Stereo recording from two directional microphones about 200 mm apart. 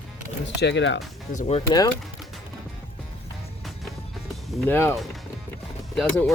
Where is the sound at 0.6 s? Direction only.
60° left (ahead or behind).